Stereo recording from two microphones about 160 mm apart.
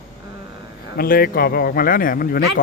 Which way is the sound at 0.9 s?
70° left (ahead or behind).